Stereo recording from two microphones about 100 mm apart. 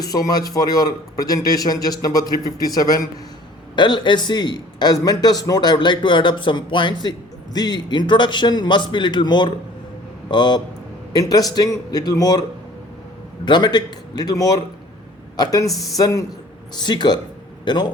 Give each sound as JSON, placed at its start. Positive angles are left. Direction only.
{"t": 0.0, "sound": "a man's voice", "side_deg": 40}
{"t": 3.8, "sound": "a man's voice", "side_deg": 50}